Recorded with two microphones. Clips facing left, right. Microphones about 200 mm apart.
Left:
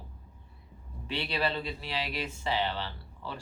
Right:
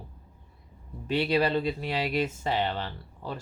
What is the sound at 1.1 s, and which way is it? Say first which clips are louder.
Speech: right 7 dB; 45° right (ahead or behind).